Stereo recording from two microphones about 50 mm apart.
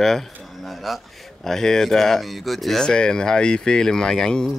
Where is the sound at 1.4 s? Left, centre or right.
Centre.